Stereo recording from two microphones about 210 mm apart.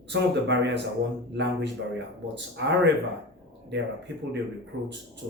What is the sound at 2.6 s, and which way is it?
Speech, 55° right (ahead or behind).